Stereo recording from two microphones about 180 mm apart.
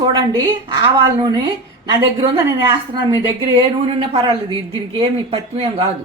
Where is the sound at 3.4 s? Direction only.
25° right (ahead or behind).